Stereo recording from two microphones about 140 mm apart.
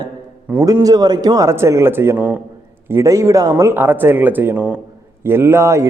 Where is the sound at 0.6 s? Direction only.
25° right (ahead or behind).